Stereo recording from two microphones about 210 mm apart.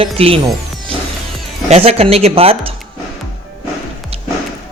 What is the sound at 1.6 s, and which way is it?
Speech, 30° right (ahead or behind).